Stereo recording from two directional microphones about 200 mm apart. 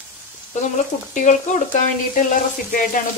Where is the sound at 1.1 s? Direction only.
40° left (ahead or behind).